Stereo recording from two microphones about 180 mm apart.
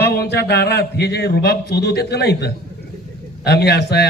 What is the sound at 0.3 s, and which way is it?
A man's voice, 65° left (ahead or behind).